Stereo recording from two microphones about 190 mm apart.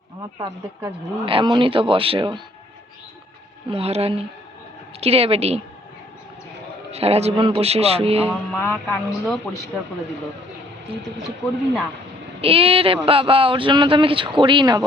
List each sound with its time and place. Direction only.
0.3 s speech: 20° right (ahead or behind)
3.7 s a man's voice: 30° right (ahead or behind)
6.9 s a man's voice: 30° right (ahead or behind)
8.5 s speech: 10° left (ahead or behind)
12.4 s speech: 30° right (ahead or behind)